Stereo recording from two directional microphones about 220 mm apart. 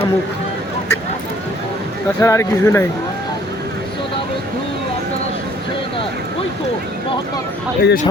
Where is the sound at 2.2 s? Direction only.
10° left (ahead or behind).